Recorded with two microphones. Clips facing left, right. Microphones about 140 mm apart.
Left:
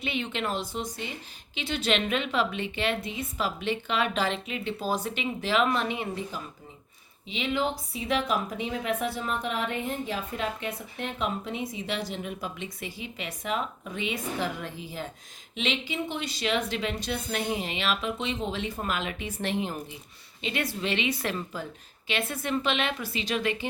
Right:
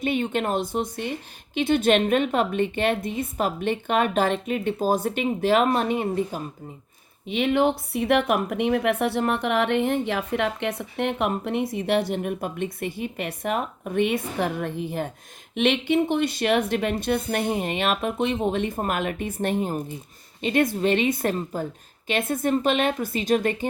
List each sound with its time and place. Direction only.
0.0 s a woman's voice: 50° right (ahead or behind)